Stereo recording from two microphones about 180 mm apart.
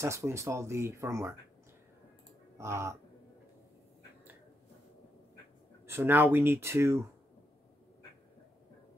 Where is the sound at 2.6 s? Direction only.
15° right (ahead or behind).